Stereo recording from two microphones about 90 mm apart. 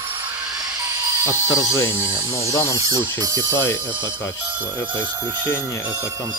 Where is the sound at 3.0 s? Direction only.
50° right (ahead or behind).